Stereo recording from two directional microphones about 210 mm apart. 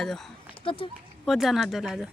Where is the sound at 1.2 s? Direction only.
Centre (ahead or behind).